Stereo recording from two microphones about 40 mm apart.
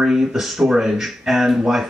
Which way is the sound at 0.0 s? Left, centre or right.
Centre.